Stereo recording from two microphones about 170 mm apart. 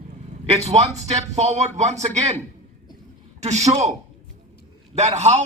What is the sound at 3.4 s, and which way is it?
Speech, 40° right (ahead or behind).